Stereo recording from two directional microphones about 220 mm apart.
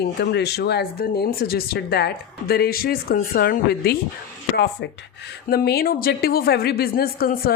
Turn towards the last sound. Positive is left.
turn(degrees=40)  # may be behind; listen again after turning